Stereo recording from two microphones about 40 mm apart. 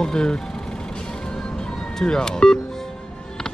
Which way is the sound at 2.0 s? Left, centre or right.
Centre.